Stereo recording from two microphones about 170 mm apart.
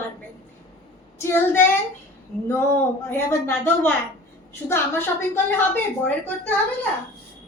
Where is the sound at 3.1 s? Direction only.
10° left (ahead or behind).